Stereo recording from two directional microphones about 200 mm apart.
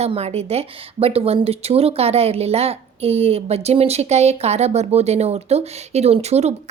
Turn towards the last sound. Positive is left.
turn(degrees=-35)  # may be behind; listen again after turning